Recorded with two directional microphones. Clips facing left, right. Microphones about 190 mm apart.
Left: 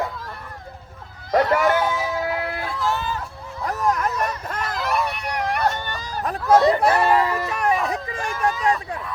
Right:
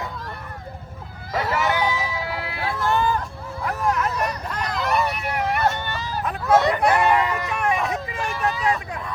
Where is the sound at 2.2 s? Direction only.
50° left (ahead or behind).